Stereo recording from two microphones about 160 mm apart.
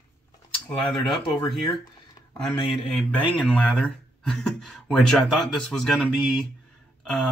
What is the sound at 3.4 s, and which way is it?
Speech, 5° left (ahead or behind).